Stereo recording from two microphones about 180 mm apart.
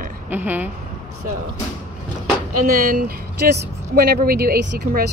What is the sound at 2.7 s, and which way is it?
Speech, 50° right (ahead or behind).